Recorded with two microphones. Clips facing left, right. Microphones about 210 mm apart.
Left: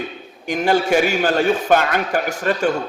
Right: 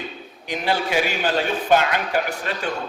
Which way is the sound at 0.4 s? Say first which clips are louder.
Left 6 dB; 45° left (ahead or behind).